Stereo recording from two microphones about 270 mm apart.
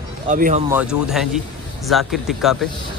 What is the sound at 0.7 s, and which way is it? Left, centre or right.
A man's voice, centre.